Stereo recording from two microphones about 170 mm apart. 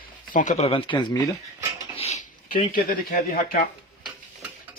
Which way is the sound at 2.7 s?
60° left (ahead or behind).